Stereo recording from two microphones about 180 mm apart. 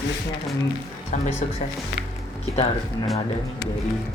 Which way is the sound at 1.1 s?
40° left (ahead or behind).